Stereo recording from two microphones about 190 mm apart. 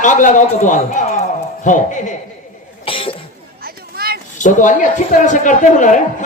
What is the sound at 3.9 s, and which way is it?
Children playing, 55° right (ahead or behind).